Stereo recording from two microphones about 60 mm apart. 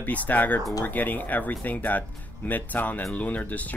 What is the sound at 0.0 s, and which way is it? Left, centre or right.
Speech, left.